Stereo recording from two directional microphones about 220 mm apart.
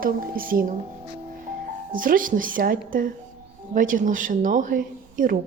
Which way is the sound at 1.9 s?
40° right (ahead or behind).